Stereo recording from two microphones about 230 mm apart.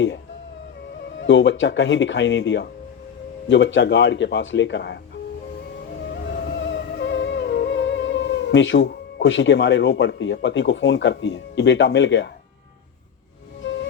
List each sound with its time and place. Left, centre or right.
1.2 s speech: left
6.2 s music: left